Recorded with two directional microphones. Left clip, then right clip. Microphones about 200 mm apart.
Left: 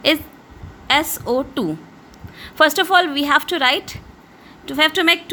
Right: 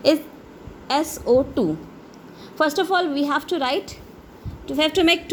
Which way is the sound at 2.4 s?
25° left (ahead or behind).